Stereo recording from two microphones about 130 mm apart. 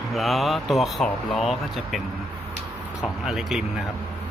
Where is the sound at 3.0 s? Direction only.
Centre (ahead or behind).